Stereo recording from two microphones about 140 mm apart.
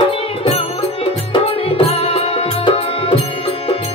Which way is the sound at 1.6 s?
45° left (ahead or behind).